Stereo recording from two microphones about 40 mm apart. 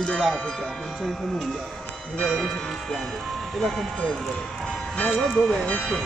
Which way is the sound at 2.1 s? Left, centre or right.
Centre.